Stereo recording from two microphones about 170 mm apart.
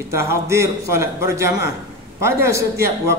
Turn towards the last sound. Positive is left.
turn(degrees=-15)  # may be behind; listen again after turning